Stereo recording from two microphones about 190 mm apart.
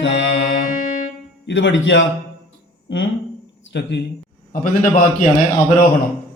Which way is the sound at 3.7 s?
65° left (ahead or behind).